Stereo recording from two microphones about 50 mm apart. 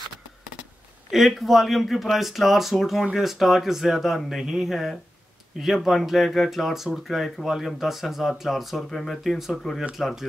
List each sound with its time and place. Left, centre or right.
1.1 s speech: centre